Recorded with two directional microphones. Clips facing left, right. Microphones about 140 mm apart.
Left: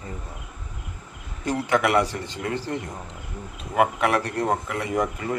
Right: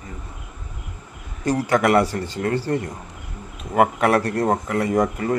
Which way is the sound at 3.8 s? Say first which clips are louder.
Right 4 dB; 45° right (ahead or behind).